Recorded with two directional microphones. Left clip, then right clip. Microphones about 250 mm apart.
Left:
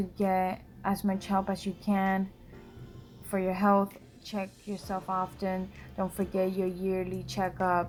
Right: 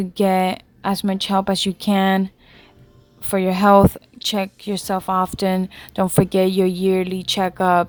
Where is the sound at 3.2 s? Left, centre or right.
Right.